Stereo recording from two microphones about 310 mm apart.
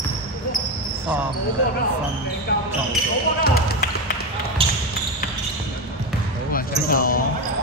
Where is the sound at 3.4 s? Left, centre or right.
Left.